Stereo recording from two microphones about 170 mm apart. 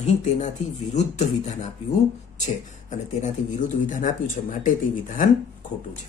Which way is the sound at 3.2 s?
50° left (ahead or behind).